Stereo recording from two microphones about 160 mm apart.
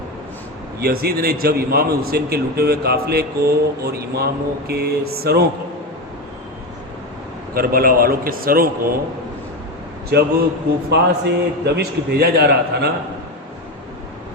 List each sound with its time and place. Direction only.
0.8 s a man's voice: 75° right (ahead or behind)
7.5 s a man's voice: 65° right (ahead or behind)
10.1 s a man's voice: 90° right